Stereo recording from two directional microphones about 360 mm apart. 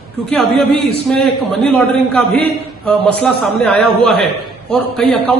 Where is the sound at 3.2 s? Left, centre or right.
Centre.